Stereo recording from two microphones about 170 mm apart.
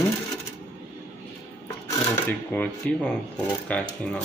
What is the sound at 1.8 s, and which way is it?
Sewing machine, 20° left (ahead or behind).